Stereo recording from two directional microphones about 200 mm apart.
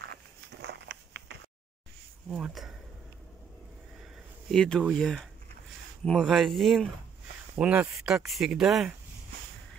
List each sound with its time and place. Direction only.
0.1 s a sound: 55° right (ahead or behind)
2.2 s speech: centre (ahead or behind)
4.5 s speech: centre (ahead or behind)